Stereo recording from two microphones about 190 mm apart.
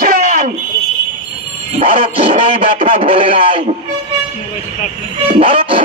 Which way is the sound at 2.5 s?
30° right (ahead or behind).